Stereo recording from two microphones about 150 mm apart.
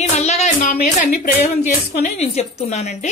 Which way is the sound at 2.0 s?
50° left (ahead or behind).